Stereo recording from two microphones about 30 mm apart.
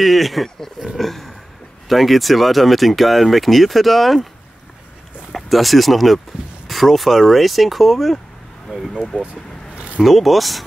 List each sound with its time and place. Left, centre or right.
0.0 s speech: centre
5.3 s speech: centre
8.7 s speech: right
9.2 s a sound: right
10.0 s speech: centre